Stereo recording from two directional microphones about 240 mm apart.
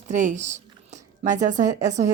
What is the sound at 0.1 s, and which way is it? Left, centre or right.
A woman's voice, right.